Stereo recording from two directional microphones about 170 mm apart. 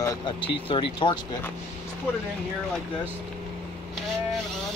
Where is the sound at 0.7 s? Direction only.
30° left (ahead or behind).